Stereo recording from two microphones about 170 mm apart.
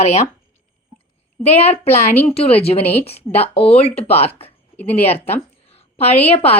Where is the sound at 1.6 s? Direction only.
35° left (ahead or behind).